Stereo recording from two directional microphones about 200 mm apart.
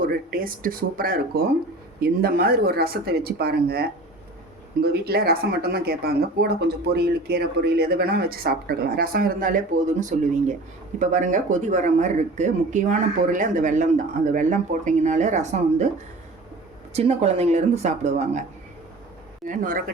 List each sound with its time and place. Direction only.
0.0 s speech: 45° right (ahead or behind)
16.9 s speech: 30° right (ahead or behind)
19.5 s speech: 45° right (ahead or behind)